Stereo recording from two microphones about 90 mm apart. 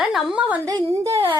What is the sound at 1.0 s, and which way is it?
Speech, 35° right (ahead or behind).